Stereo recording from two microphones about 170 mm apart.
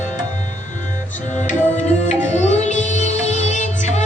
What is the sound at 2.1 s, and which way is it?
Music, 45° left (ahead or behind).